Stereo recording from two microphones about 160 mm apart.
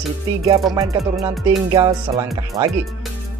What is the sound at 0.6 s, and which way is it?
Music, centre (ahead or behind).